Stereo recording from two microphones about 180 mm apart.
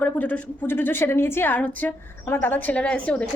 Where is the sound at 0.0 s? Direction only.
10° left (ahead or behind).